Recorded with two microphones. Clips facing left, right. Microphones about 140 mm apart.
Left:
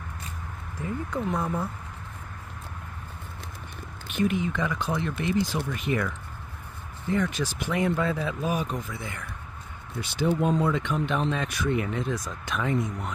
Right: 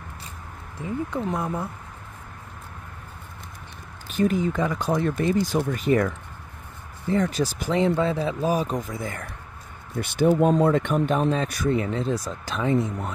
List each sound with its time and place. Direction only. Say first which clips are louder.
0.7 s speech: right 3 dB; 20° right (ahead or behind)
4.1 s speech: right 4 dB; 40° right (ahead or behind)
7.8 s speech: right 4 dB; 25° right (ahead or behind)
9.9 s speech: right 6 dB; 55° right (ahead or behind); by 13.1 s 30° right (ahead or behind)